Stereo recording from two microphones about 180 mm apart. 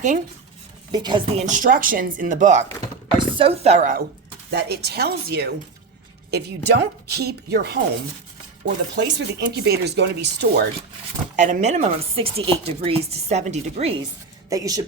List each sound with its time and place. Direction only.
0.9 s a woman's voice: 25° right (ahead or behind)
1.5 s speech: 45° right (ahead or behind)
3.2 s speech: 30° right (ahead or behind); by 4.0 s 45° right (ahead or behind)
4.5 s a woman's voice: 65° right (ahead or behind)
8.6 s speech: 75° right (ahead or behind)
11.3 s speech: 40° right (ahead or behind)
14.5 s a woman's voice: 20° right (ahead or behind)